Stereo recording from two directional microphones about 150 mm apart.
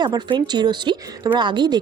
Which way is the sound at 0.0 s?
30° right (ahead or behind).